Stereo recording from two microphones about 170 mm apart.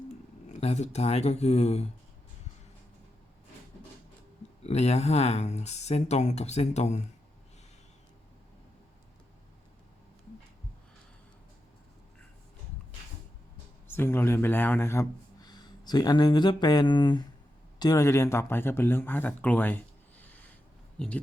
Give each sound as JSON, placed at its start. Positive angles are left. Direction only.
{"t": 0.4, "sound": "speech", "side_deg": 40}
{"t": 4.6, "sound": "speech", "side_deg": 40}
{"t": 13.8, "sound": "speech", "side_deg": 15}